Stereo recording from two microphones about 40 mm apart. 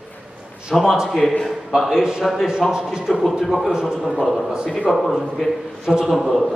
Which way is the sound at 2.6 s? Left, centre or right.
Centre.